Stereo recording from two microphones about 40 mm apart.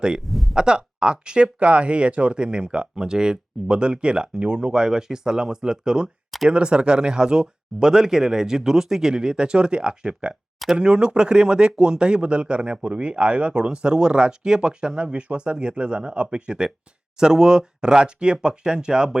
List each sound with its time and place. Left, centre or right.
0.5 s speech: right